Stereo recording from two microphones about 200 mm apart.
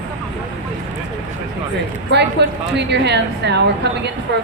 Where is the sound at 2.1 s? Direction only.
60° right (ahead or behind).